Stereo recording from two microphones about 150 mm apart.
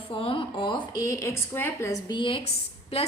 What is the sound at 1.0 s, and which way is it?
A woman's voice, 20° left (ahead or behind).